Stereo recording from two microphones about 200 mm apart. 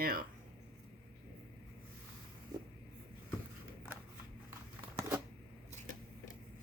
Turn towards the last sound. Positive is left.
turn(degrees=-15)  # may be behind; listen again after turning